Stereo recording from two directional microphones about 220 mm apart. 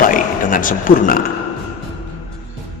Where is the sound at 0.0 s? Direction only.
40° left (ahead or behind).